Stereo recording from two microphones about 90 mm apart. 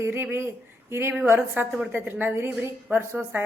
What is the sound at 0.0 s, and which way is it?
A woman's voice, 25° right (ahead or behind).